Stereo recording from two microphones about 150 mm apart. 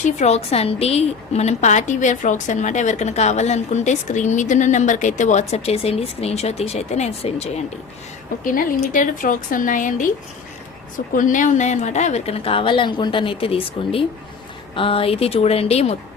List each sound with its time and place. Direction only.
0.0 s a woman's voice: 50° left (ahead or behind)
8.4 s speech: 60° left (ahead or behind)
11.1 s a woman's voice: 60° left (ahead or behind); by 16.0 s 45° left (ahead or behind)